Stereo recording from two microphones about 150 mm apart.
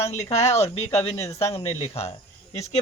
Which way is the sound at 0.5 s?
45° left (ahead or behind).